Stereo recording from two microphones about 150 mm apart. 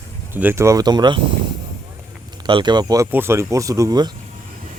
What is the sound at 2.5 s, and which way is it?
Speech, 30° right (ahead or behind).